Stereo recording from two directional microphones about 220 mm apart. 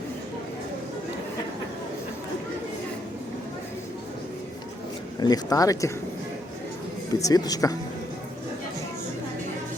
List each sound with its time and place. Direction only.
5.2 s speech: 15° left (ahead or behind)
7.1 s speech: 15° left (ahead or behind)